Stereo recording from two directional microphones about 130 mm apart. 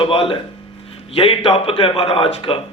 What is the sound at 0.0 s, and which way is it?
A man's voice, 45° left (ahead or behind).